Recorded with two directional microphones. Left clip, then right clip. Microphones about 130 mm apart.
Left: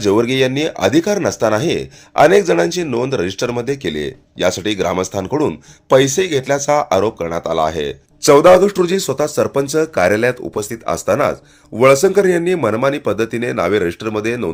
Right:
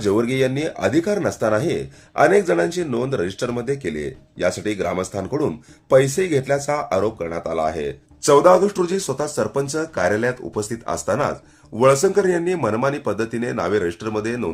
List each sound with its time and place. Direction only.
0.0 s speech: 25° left (ahead or behind)